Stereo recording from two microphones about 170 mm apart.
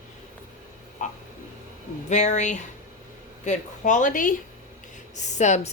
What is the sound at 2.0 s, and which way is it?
A woman's voice, 45° left (ahead or behind).